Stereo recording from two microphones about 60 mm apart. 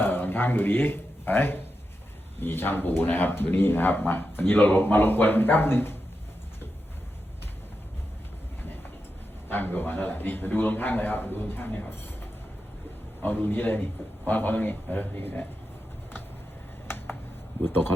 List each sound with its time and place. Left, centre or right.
0.0 s speech: left
9.5 s speech: left
13.2 s speech: left
17.7 s speech: left